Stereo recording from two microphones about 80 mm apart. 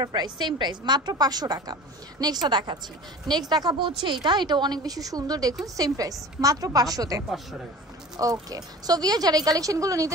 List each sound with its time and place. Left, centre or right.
0.0 s a woman's voice: right
4.0 s a woman's voice: right